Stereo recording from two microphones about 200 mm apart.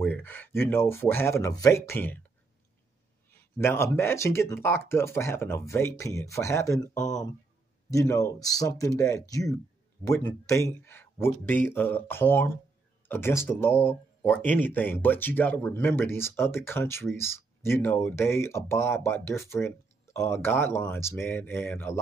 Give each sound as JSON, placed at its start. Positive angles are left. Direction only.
{"t": 0.0, "sound": "speech", "side_deg": 10}
{"t": 3.3, "sound": "speech", "side_deg": 10}